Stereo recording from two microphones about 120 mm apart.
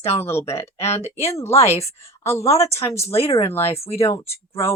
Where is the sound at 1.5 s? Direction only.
60° left (ahead or behind).